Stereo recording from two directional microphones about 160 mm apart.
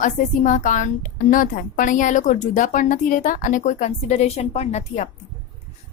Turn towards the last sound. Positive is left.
turn(degrees=45)  # may be behind; listen again after turning